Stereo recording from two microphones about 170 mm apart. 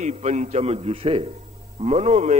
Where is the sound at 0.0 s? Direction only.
40° right (ahead or behind).